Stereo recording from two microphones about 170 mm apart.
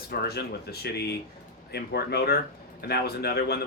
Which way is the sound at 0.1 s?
70° left (ahead or behind).